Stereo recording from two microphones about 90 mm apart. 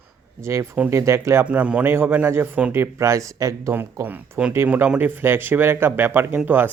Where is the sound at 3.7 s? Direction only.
25° right (ahead or behind).